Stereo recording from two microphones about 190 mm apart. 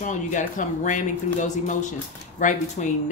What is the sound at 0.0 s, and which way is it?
Speech, 40° left (ahead or behind).